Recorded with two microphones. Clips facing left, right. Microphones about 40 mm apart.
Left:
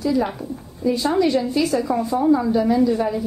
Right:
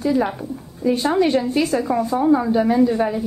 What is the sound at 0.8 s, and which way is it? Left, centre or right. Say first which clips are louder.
A woman's voice: right 1 dB; right.